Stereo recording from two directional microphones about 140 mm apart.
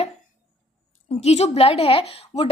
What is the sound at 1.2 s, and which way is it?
Speech, 50° left (ahead or behind).